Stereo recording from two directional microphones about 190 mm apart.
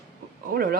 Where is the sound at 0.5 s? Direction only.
50° right (ahead or behind).